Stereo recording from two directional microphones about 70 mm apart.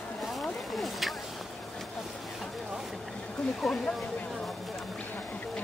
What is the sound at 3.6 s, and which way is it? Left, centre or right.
Speech, centre.